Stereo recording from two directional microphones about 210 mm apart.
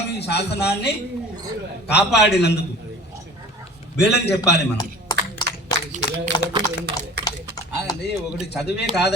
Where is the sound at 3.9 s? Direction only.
50° left (ahead or behind).